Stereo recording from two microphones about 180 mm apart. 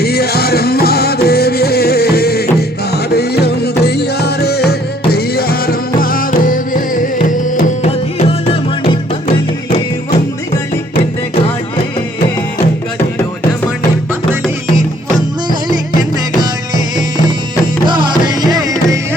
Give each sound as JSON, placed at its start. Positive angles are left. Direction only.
{"t": 0.0, "sound": "music", "side_deg": 60}
{"t": 16.0, "sound": "music", "side_deg": -20}
{"t": 17.8, "sound": "music", "side_deg": -25}